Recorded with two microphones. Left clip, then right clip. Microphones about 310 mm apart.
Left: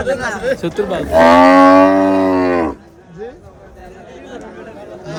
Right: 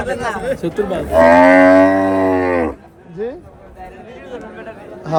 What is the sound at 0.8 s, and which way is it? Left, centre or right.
Livestock, left.